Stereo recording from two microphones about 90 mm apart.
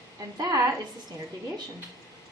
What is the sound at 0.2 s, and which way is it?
Speech, 40° right (ahead or behind).